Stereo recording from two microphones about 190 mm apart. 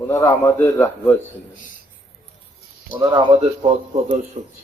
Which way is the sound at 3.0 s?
20° right (ahead or behind).